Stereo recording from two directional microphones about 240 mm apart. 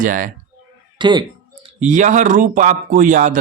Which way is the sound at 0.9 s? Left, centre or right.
Centre.